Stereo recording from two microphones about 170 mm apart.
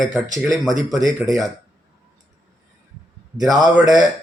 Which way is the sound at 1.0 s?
20° right (ahead or behind).